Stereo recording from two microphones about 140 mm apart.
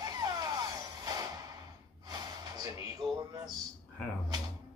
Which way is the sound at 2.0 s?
25° right (ahead or behind).